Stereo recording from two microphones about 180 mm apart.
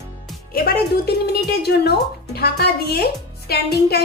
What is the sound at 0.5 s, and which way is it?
Music, 60° left (ahead or behind).